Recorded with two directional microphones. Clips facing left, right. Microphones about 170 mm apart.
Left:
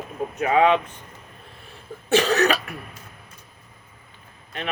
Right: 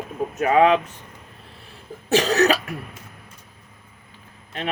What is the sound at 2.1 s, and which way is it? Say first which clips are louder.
Speech: right 1 dB; 40° right (ahead or behind).